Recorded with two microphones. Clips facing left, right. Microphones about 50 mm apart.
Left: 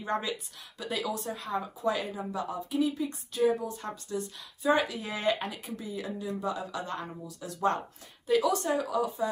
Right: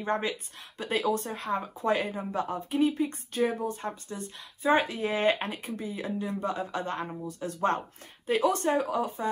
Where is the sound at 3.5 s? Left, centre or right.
Right.